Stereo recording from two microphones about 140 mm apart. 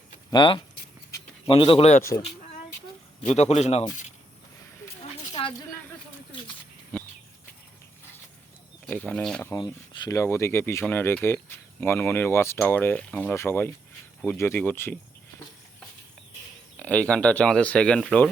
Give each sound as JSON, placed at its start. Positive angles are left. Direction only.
{"t": 0.3, "sound": "speech", "side_deg": 35}
{"t": 3.2, "sound": "a man's voice", "side_deg": 55}
{"t": 5.3, "sound": "a sound", "side_deg": 35}
{"t": 8.9, "sound": "speech", "side_deg": 10}
{"t": 9.6, "sound": "speech", "side_deg": 30}
{"t": 16.8, "sound": "speech", "side_deg": 10}